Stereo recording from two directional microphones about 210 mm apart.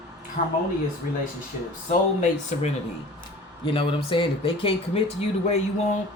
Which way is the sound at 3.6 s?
25° left (ahead or behind).